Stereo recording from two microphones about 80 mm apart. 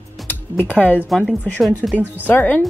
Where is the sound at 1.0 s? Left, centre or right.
Centre.